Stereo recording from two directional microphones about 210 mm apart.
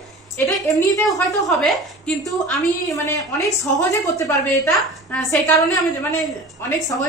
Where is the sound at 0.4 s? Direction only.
15° left (ahead or behind).